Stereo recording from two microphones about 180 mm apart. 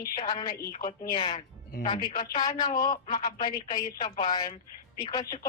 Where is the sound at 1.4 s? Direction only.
40° left (ahead or behind).